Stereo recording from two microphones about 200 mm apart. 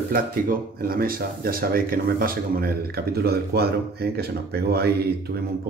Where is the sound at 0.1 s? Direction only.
45° right (ahead or behind).